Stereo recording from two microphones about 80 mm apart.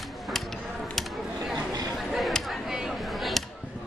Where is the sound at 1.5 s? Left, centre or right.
Right.